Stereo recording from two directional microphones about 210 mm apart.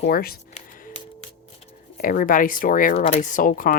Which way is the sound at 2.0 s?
40° left (ahead or behind).